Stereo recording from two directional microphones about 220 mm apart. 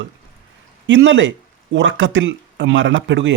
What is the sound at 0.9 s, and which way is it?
Speech, 55° right (ahead or behind).